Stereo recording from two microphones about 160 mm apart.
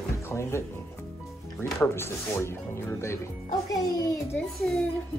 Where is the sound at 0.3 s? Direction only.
15° left (ahead or behind).